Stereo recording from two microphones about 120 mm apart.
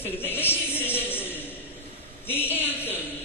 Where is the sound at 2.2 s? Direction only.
20° left (ahead or behind).